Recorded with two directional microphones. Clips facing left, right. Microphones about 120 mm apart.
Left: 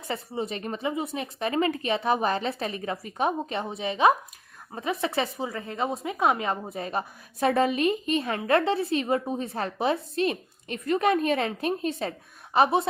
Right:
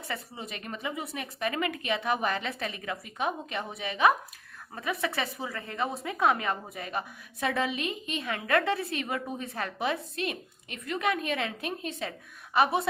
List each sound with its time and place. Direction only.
0.1 s a woman's voice: 30° left (ahead or behind)
12.5 s a woman's voice: 30° left (ahead or behind)